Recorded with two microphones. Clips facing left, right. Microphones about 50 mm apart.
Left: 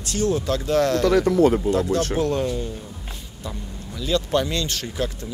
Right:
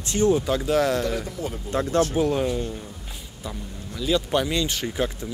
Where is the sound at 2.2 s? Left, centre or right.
Centre.